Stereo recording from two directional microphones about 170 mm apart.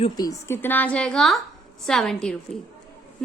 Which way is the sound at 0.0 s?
20° left (ahead or behind).